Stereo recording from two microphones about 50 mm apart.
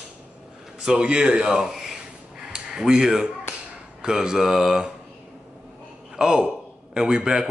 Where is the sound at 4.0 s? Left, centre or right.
Centre.